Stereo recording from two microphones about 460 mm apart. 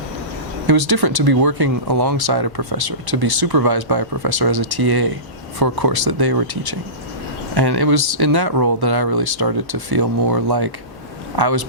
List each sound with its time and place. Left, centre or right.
0.7 s speech: right